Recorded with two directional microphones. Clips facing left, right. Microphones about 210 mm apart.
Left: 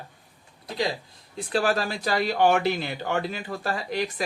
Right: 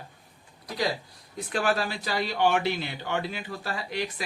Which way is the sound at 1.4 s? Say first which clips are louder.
Left 2 dB; 35° left (ahead or behind).